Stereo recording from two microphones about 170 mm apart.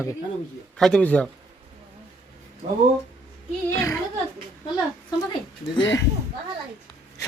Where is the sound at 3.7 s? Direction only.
20° left (ahead or behind).